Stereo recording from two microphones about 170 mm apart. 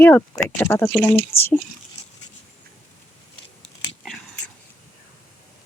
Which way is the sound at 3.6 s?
Centre (ahead or behind).